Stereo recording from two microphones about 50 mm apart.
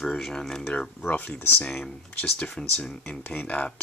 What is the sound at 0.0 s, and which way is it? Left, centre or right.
Speech, centre.